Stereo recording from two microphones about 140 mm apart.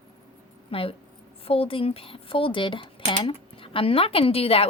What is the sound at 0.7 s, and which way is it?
A woman's voice, 40° left (ahead or behind).